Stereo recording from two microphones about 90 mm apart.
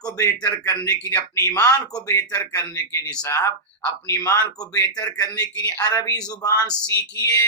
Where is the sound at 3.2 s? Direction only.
30° left (ahead or behind).